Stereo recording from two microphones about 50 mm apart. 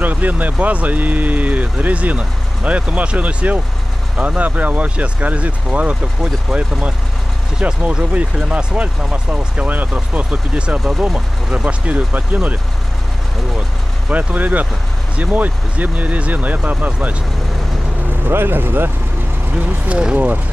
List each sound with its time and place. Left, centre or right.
0.0 s speech: right
7.9 s speech: right
10.8 s speech: centre
11.5 s speech: right
14.0 s speech: right
18.3 s speech: right
19.9 s speech: centre